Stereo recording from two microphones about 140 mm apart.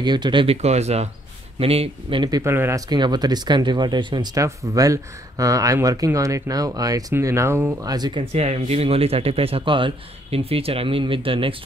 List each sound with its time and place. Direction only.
0.0 s speech: 30° right (ahead or behind)
0.6 s speech: 50° right (ahead or behind); by 2.4 s 35° right (ahead or behind)
2.4 s speech: 15° right (ahead or behind)
2.9 s speech: 30° right (ahead or behind)
8.3 s speech: 50° right (ahead or behind)